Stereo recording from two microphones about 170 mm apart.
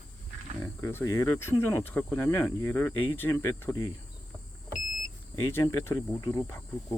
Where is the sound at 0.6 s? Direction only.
15° left (ahead or behind).